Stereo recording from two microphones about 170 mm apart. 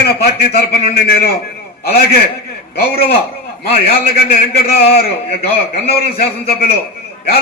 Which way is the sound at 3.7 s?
65° left (ahead or behind).